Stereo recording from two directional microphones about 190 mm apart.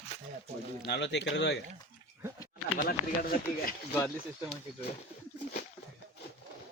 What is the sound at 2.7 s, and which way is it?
Speech, 50° left (ahead or behind).